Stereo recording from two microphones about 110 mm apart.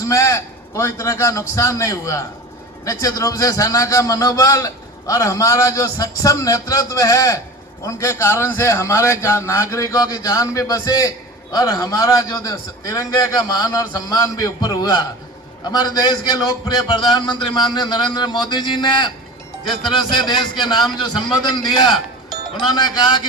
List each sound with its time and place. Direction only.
0.0 s a man's voice: 30° left (ahead or behind); by 19.1 s 45° left (ahead or behind)
20.1 s a man's voice: 40° left (ahead or behind)